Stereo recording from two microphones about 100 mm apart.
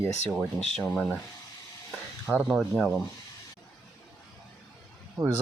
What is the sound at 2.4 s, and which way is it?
Speech, centre (ahead or behind).